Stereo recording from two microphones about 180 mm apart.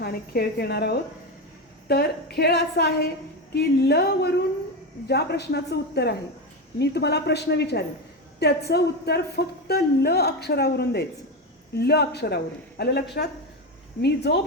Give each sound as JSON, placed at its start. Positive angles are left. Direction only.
{"t": 0.0, "sound": "a woman's voice", "side_deg": 60}